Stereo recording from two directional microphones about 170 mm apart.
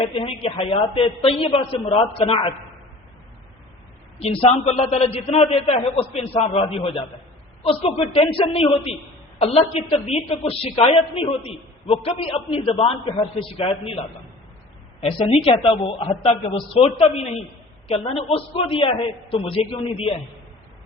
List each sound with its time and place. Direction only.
0.0 s a woman's voice: 35° left (ahead or behind)
4.2 s a woman's voice: 35° left (ahead or behind)
15.3 s a woman's voice: 30° left (ahead or behind)